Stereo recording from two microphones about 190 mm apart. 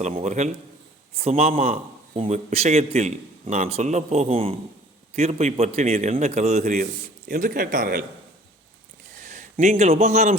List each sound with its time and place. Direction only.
0.0 s a man's voice: 35° right (ahead or behind)
9.2 s a man's voice: 40° right (ahead or behind)